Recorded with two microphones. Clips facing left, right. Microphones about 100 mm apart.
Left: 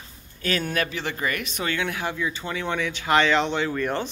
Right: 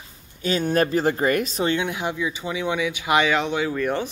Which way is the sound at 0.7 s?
40° right (ahead or behind).